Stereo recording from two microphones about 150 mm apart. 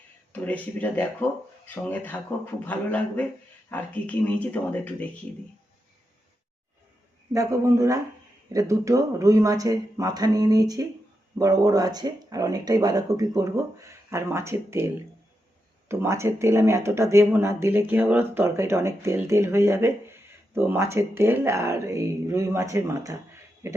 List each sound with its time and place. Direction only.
0.3 s speech: 10° left (ahead or behind)
7.3 s speech: 20° right (ahead or behind)
15.9 s speech: 20° right (ahead or behind)